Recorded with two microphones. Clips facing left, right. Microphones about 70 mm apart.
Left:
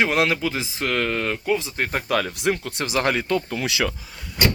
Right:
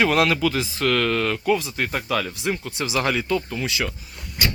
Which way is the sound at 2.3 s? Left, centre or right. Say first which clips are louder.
Left 2 dB; left.